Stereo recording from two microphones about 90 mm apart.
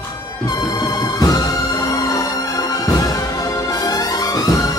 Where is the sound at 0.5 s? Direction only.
50° left (ahead or behind).